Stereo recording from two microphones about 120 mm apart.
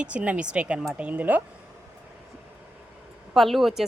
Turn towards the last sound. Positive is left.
turn(degrees=0)  # may be behind; listen again after turning